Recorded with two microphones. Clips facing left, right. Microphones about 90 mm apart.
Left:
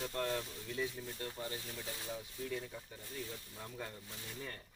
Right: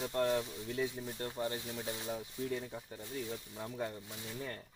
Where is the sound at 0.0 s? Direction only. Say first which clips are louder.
Right 5 dB; 20° right (ahead or behind).